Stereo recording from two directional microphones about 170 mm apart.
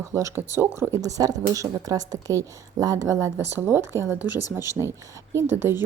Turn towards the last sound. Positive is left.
turn(degrees=-15)  # may be behind; listen again after turning